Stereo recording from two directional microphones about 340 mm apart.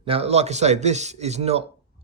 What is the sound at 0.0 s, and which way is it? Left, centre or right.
A man's voice, centre.